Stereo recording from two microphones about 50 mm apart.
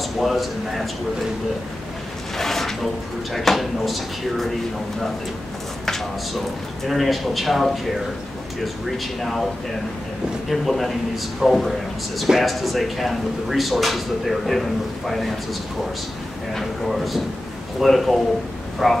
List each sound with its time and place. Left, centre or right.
0.2 s speech: centre
2.3 s a sound: centre
3.3 s speech: centre
5.9 s speech: centre
8.9 s speech: centre
10.5 s speech: centre
16.5 s speech: centre